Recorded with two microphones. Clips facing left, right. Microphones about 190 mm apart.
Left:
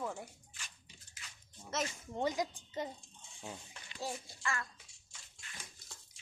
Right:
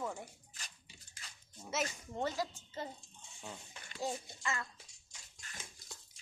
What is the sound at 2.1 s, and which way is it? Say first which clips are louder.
Speech: left 2 dB; 15° left (ahead or behind).